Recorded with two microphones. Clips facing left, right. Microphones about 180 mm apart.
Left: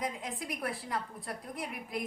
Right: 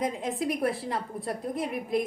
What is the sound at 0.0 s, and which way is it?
A woman's voice, 25° right (ahead or behind).